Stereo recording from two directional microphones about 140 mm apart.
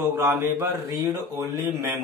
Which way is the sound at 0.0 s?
25° right (ahead or behind).